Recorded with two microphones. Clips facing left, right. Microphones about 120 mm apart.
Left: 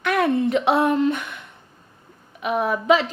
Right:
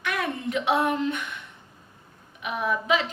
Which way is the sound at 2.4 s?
40° left (ahead or behind).